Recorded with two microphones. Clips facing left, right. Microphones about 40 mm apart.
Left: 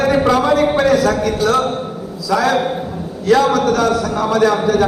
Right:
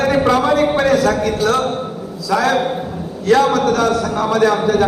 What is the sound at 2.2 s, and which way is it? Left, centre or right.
Speech, right.